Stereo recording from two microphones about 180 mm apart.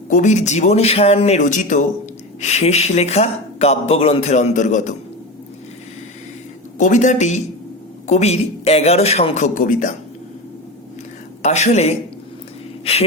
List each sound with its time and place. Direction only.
0.1 s speech: 40° left (ahead or behind)
6.7 s speech: 45° left (ahead or behind)
11.4 s speech: 40° left (ahead or behind)